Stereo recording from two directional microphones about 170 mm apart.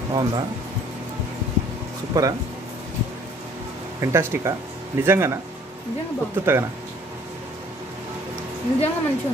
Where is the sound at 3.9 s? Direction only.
15° right (ahead or behind).